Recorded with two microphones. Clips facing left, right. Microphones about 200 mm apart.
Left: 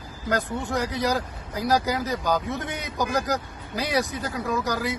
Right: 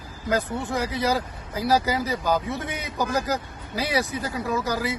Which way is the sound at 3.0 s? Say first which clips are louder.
Even; 15° left (ahead or behind).